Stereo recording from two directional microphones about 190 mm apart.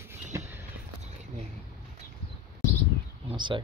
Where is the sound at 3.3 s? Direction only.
25° right (ahead or behind).